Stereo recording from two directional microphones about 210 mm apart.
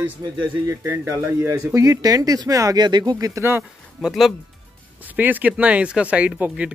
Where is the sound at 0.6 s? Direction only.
15° right (ahead or behind).